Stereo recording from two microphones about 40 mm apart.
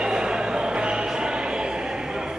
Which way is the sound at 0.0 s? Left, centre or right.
Centre.